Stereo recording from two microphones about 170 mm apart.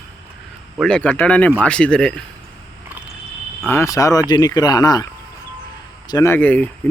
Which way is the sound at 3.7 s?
20° left (ahead or behind).